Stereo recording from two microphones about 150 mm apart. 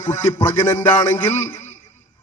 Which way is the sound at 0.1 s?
20° left (ahead or behind).